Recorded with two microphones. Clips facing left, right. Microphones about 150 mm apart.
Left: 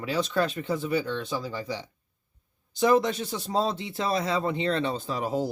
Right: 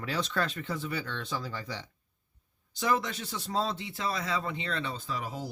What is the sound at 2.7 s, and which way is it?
Speech, 20° left (ahead or behind).